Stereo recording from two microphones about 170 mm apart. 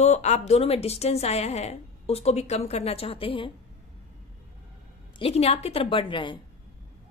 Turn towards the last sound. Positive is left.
turn(degrees=30)  # may be behind; listen again after turning